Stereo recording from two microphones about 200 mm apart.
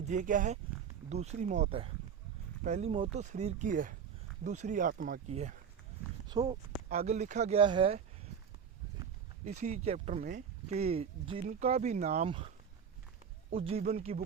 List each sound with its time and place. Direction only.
0.0 s speech: 40° right (ahead or behind)
6.2 s speech: 20° right (ahead or behind)
6.9 s speech: 35° right (ahead or behind)
9.4 s speech: 35° right (ahead or behind)
10.2 s speech: 45° right (ahead or behind)
10.7 s speech: 30° right (ahead or behind)
13.5 s speech: 30° right (ahead or behind)